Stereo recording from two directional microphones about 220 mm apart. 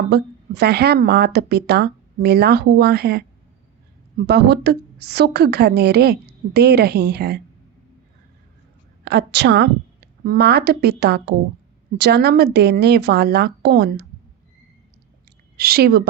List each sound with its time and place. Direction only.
0.1 s a woman's voice: 50° right (ahead or behind)
4.3 s a woman's voice: 50° right (ahead or behind)
9.0 s a woman's voice: 50° right (ahead or behind)
15.5 s a woman's voice: 45° right (ahead or behind)